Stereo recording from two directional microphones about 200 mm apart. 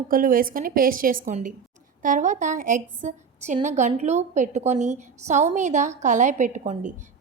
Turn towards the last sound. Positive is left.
turn(degrees=-35)  # may be behind; listen again after turning